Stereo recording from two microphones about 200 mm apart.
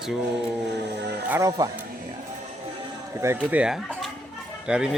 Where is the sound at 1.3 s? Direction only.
15° right (ahead or behind).